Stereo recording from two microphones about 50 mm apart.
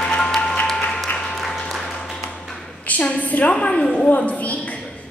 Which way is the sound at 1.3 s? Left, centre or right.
Centre.